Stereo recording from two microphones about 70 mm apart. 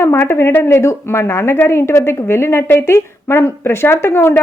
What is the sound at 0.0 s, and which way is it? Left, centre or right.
A woman's voice, left.